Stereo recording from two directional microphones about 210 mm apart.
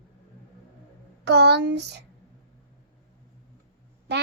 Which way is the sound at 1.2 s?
50° right (ahead or behind).